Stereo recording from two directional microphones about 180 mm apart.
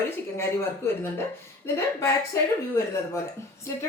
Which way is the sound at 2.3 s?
15° left (ahead or behind).